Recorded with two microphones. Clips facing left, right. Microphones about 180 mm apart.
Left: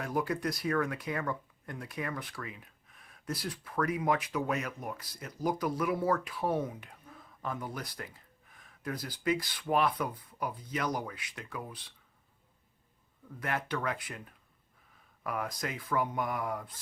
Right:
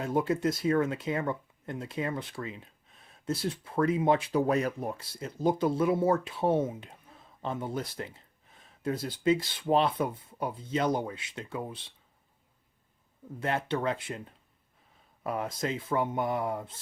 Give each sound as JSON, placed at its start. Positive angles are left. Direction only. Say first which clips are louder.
{"t": 0.0, "sound": "speech", "louder": "right 5 dB", "side_deg": -25}
{"t": 13.4, "sound": "speech", "louder": "right 4 dB", "side_deg": -25}